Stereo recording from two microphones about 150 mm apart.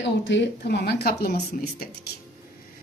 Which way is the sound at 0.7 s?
90° left.